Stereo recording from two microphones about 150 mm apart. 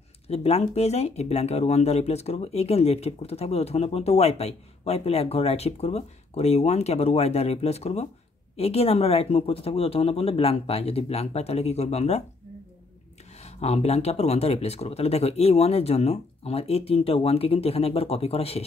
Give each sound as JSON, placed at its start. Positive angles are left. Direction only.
{"t": 0.3, "sound": "speech", "side_deg": 45}
{"t": 13.4, "sound": "speech", "side_deg": 45}